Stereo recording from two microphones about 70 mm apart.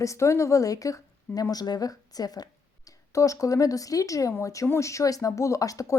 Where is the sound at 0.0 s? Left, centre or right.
Left.